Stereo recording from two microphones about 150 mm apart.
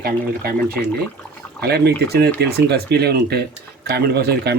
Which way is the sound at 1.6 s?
90° right.